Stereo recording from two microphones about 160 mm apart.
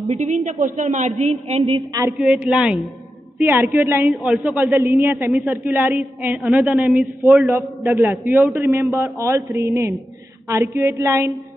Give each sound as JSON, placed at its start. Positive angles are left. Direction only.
{"t": 0.1, "sound": "a woman's voice", "side_deg": -45}
{"t": 2.1, "sound": "a woman's voice", "side_deg": -5}
{"t": 8.5, "sound": "a woman's voice", "side_deg": -5}
{"t": 8.9, "sound": "a man's voice", "side_deg": -15}